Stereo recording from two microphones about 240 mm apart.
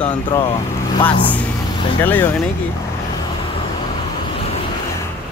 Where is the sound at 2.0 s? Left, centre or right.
Centre.